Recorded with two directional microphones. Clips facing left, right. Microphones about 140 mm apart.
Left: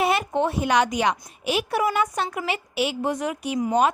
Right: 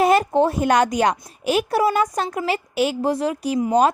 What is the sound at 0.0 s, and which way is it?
A woman's voice, 40° right (ahead or behind).